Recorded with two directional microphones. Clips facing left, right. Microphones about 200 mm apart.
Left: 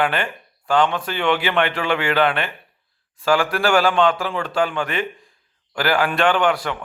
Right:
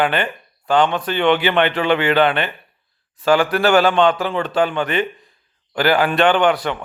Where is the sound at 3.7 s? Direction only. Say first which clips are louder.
Right 2 dB; 20° right (ahead or behind).